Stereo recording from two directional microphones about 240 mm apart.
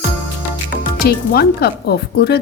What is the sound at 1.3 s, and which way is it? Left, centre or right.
Speech, left.